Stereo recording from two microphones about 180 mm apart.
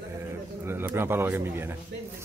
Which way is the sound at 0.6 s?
10° right (ahead or behind).